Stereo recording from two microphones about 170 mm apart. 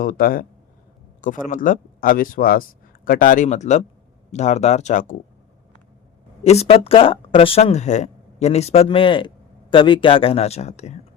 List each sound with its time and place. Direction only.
0.0 s speech: 55° left (ahead or behind)
6.4 s speech: 40° left (ahead or behind)